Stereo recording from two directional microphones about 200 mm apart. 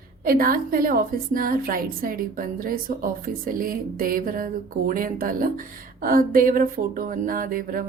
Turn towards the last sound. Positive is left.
turn(degrees=-45)  # may be behind; listen again after turning